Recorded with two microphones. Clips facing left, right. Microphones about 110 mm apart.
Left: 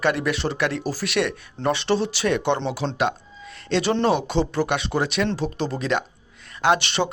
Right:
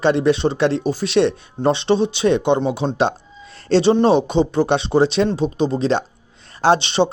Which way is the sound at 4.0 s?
25° right (ahead or behind).